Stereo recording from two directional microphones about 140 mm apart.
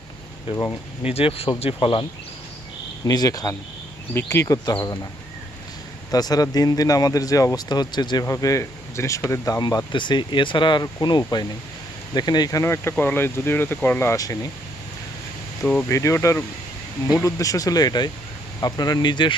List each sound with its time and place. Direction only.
1.0 s speech: 45° left (ahead or behind)
3.1 s speech: 25° left (ahead or behind)
6.1 s speech: 30° left (ahead or behind)
15.9 s speech: 20° left (ahead or behind)